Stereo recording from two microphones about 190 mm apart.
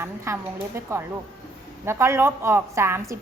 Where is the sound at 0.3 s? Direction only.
15° right (ahead or behind).